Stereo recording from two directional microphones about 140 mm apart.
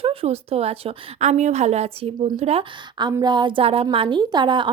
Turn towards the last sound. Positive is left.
turn(degrees=-35)  # may be behind; listen again after turning